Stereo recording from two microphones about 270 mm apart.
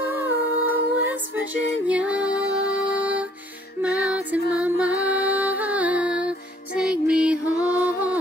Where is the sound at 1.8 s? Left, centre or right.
Centre.